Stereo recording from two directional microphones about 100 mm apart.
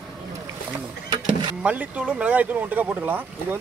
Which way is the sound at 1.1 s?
50° right (ahead or behind).